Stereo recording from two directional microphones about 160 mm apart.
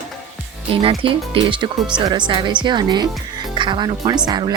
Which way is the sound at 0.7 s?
35° right (ahead or behind).